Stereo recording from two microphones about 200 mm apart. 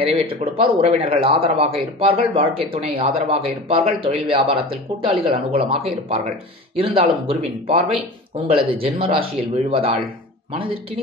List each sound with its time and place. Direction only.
0.0 s speech: 30° right (ahead or behind)
8.5 s speech: 25° right (ahead or behind)